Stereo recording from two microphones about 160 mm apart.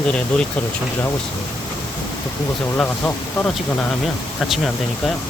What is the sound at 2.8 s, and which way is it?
Speech, 10° left (ahead or behind).